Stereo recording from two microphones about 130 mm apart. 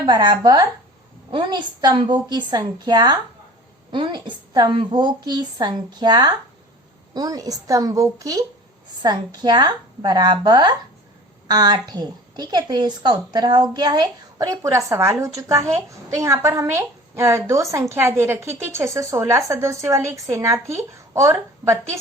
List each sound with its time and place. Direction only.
0.0 s a woman's voice: 35° right (ahead or behind)